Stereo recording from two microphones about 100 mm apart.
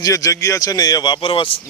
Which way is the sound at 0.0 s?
35° left (ahead or behind).